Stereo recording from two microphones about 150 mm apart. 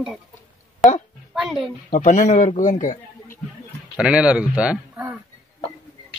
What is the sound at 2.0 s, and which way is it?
A man's voice, 55° left (ahead or behind).